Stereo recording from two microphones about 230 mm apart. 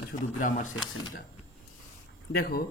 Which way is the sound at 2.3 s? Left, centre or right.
Left.